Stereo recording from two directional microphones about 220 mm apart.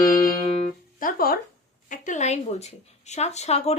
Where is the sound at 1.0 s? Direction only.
40° left (ahead or behind).